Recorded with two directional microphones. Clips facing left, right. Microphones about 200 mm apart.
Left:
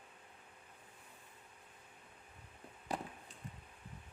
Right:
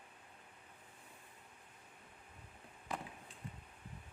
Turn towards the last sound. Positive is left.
turn(degrees=35)  # may be behind; listen again after turning